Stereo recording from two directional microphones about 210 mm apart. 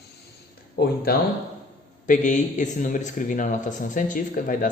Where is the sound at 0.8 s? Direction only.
50° left (ahead or behind).